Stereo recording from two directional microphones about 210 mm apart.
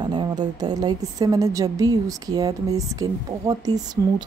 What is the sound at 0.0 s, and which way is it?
A woman's voice, 20° right (ahead or behind).